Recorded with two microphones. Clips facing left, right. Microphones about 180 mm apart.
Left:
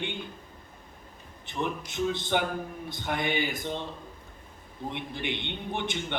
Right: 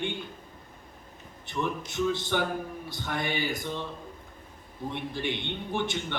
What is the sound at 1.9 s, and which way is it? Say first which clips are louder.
A man's voice: even; 20° left (ahead or behind).